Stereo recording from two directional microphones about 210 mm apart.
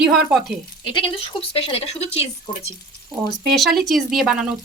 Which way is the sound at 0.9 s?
25° left (ahead or behind).